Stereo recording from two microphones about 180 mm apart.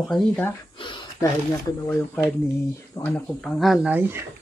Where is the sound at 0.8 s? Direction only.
25° left (ahead or behind).